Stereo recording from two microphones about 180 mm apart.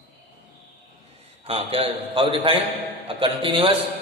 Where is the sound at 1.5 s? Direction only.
35° right (ahead or behind).